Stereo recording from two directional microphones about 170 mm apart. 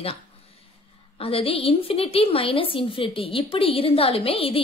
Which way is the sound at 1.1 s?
35° left (ahead or behind).